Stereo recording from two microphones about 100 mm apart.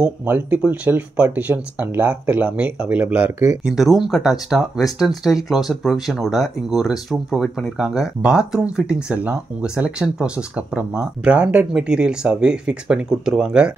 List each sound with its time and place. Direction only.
0.0 s speech: 15° right (ahead or behind)
3.6 s speech: centre (ahead or behind)